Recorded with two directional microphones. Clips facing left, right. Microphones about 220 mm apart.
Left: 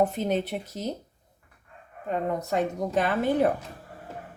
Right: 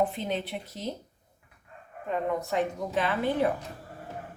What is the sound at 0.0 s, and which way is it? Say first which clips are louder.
Speech: left 4 dB; 45° left (ahead or behind).